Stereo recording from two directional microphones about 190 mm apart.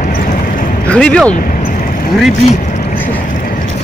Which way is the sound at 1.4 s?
45° left (ahead or behind).